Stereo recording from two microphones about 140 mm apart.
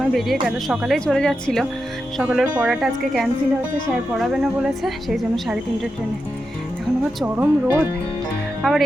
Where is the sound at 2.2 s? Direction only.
10° right (ahead or behind).